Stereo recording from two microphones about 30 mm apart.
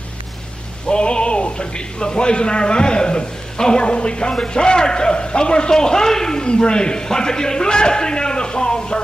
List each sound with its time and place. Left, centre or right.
0.8 s a man's voice: left; by 6.4 s centre
6.4 s a man's voice: left